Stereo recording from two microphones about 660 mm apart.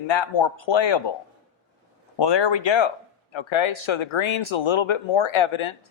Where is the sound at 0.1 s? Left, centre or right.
Left.